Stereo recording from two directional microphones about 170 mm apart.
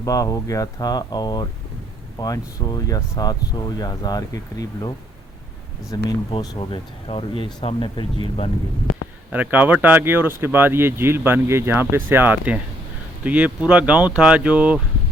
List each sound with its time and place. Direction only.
0.0 s speech: 20° left (ahead or behind)
5.9 s speech: 25° left (ahead or behind)
9.3 s speech: 10° right (ahead or behind)